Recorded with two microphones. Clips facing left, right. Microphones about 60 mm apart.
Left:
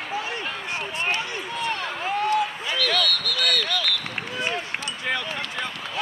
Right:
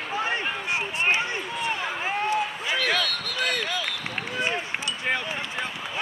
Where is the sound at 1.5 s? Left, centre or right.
Centre.